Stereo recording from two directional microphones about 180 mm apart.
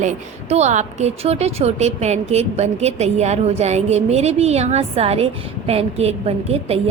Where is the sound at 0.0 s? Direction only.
40° right (ahead or behind).